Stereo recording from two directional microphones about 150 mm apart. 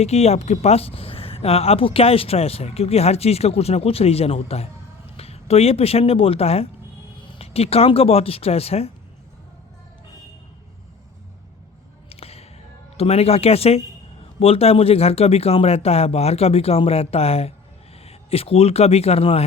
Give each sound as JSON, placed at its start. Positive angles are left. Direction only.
{"t": 0.0, "sound": "speech", "side_deg": 45}
{"t": 12.0, "sound": "a sound", "side_deg": 40}
{"t": 13.0, "sound": "a man's voice", "side_deg": 45}